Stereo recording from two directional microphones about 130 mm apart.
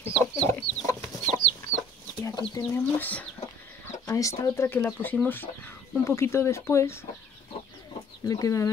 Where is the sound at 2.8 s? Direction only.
15° left (ahead or behind).